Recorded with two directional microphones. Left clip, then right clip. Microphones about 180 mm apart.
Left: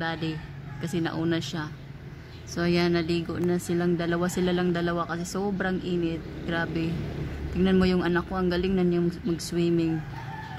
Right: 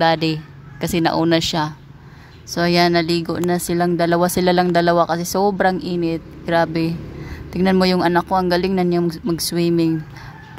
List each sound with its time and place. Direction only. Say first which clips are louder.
0.0 s speech: right 15 dB; 40° right (ahead or behind)